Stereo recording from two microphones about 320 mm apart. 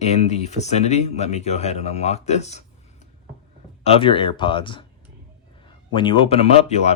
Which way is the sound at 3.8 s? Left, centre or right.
Centre.